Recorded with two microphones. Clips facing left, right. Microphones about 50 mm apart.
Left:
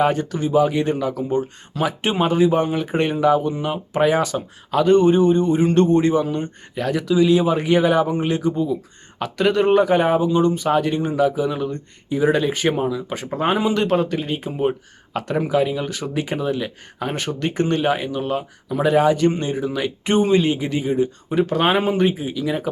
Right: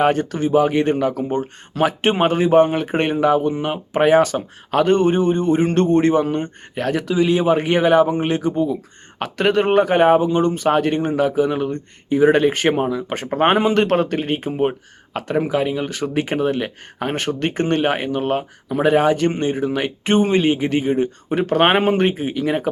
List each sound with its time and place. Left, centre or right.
0.0 s speech: right
12.8 s speech: right
15.4 s speech: right